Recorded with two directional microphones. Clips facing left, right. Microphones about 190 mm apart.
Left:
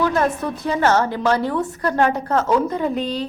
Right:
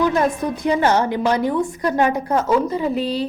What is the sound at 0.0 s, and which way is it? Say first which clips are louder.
A woman's voice: right 1 dB; 15° right (ahead or behind).